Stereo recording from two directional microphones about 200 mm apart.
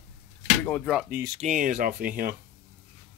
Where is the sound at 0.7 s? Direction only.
Centre (ahead or behind).